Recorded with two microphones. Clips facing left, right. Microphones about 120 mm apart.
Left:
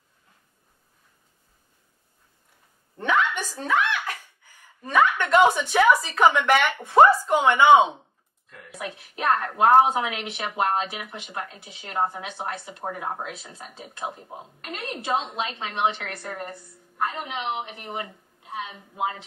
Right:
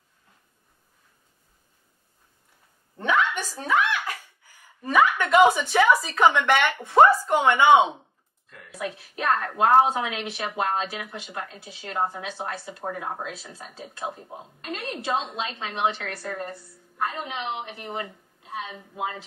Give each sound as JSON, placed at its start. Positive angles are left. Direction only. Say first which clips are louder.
{"t": 3.0, "sound": "a sound", "louder": "even", "side_deg": -10}
{"t": 3.6, "sound": "speech", "louder": "even", "side_deg": -10}
{"t": 8.5, "sound": "speech", "louder": "right 2 dB", "side_deg": 20}